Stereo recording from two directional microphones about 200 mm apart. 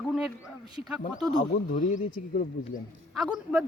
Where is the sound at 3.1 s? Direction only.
5° right (ahead or behind).